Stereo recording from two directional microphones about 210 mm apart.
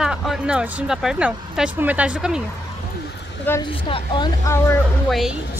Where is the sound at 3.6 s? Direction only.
25° left (ahead or behind).